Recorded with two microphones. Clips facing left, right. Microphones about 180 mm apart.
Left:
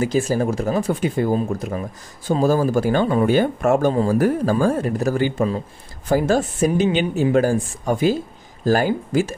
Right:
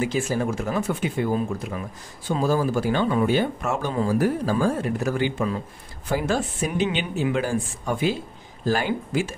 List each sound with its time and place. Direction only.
0.0 s speech: 40° left (ahead or behind)